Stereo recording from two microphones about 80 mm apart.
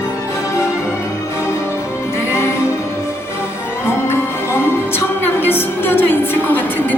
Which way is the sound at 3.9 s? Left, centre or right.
Left.